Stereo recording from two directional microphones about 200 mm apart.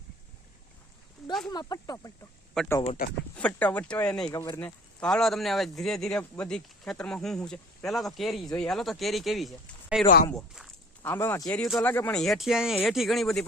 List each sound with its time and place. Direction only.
1.5 s speech: 20° left (ahead or behind); by 10.7 s centre (ahead or behind)
11.0 s speech: 10° left (ahead or behind)
11.5 s speech: centre (ahead or behind)